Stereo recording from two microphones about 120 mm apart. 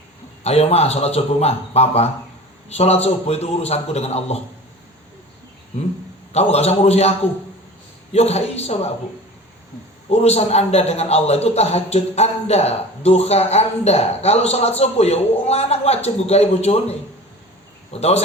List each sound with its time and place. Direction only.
0.4 s a man's voice: 60° left (ahead or behind)
6.3 s a man's voice: 60° left (ahead or behind)
8.1 s a man's voice: 60° left (ahead or behind)
10.1 s a man's voice: 60° left (ahead or behind)
17.9 s a man's voice: 60° left (ahead or behind)